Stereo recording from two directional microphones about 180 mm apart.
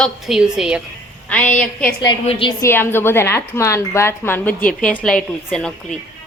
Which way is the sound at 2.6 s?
15° left (ahead or behind).